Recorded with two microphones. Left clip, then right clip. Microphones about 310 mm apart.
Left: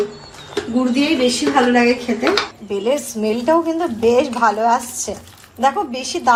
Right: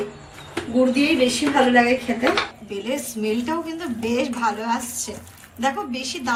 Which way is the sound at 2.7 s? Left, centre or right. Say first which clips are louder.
Left 8 dB; left.